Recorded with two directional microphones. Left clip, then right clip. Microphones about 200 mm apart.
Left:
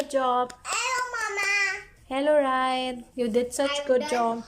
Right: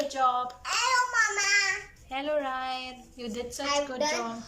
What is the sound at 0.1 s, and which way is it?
Speech, 35° left (ahead or behind).